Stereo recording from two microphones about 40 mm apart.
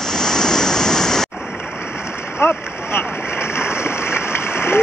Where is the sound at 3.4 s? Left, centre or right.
Left.